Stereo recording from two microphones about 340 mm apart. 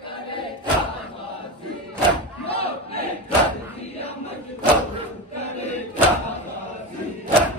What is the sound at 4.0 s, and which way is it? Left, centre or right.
Chant, centre.